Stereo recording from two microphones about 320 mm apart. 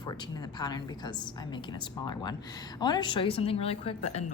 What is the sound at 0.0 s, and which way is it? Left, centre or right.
A woman's voice, centre.